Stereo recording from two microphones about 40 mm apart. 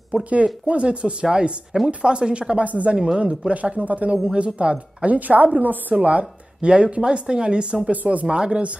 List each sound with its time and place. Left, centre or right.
0.1 s a woman's voice: right
2.6 s a woman's voice: right
6.0 s speech: right
7.9 s a woman's voice: right
8.3 s speech: right